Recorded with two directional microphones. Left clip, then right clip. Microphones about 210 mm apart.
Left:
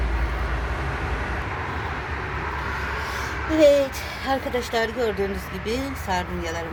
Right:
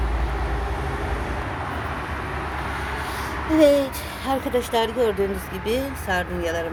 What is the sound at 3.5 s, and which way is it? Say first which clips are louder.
A woman's voice: even; centre (ahead or behind).